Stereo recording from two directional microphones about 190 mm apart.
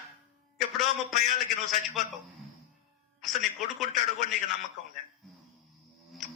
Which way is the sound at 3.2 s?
Centre (ahead or behind).